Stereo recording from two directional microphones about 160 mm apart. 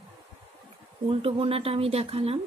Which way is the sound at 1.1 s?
35° right (ahead or behind).